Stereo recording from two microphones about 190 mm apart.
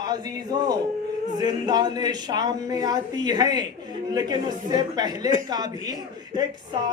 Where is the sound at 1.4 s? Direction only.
20° right (ahead or behind).